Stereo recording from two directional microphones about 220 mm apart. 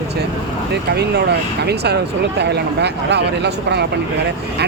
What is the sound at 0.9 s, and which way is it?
Speech, 50° right (ahead or behind).